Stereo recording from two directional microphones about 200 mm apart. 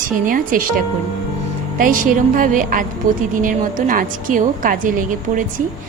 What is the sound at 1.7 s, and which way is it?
A woman's voice, 45° right (ahead or behind).